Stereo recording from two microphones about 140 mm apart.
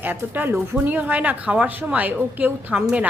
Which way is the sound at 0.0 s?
15° right (ahead or behind).